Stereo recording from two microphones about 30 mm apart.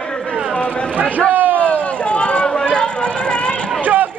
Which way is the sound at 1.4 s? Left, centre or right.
Right.